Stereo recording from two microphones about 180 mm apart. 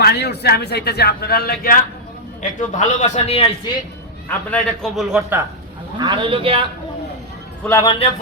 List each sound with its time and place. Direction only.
0.0 s speech: 65° left (ahead or behind)
2.6 s a man's voice: 40° left (ahead or behind)
4.3 s a man's voice: 5° left (ahead or behind)
6.0 s a man's voice: 25° right (ahead or behind)
7.6 s a man's voice: 15° left (ahead or behind)